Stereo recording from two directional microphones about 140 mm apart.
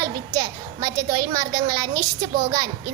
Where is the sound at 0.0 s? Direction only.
25° right (ahead or behind).